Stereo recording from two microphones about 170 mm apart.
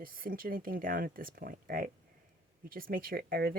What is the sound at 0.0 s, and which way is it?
Speech, 55° right (ahead or behind).